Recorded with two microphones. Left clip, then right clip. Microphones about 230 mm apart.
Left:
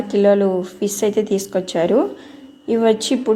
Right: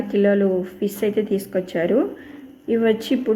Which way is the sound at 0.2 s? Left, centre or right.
Left.